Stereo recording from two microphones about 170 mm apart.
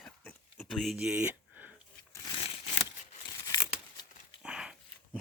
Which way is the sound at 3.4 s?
25° left (ahead or behind).